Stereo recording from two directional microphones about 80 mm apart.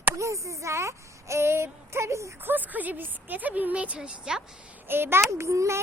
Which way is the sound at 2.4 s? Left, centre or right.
Right.